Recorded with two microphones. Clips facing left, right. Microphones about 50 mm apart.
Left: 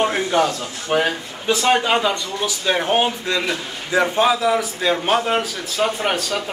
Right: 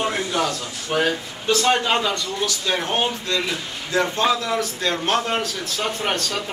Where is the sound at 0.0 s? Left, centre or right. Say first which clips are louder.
Left 4 dB; left.